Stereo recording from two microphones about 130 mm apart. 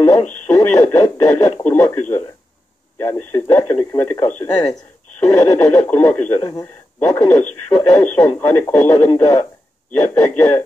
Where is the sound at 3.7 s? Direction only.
10° left (ahead or behind).